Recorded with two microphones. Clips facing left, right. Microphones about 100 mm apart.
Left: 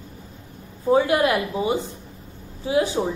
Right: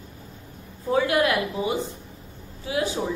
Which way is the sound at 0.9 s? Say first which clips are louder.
Left 3 dB; 25° left (ahead or behind).